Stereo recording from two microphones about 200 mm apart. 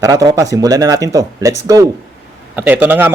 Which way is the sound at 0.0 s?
15° right (ahead or behind).